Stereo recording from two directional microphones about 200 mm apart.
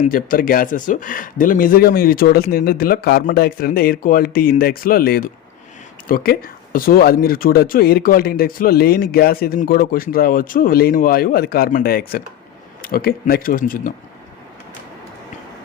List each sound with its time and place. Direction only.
0.0 s speech: 45° left (ahead or behind)